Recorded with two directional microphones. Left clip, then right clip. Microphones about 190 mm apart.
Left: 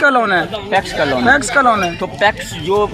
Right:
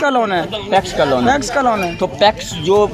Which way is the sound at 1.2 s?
5° left (ahead or behind).